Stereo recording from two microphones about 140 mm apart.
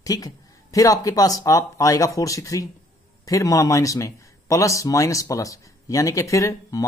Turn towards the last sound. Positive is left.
turn(degrees=25)  # may be behind; listen again after turning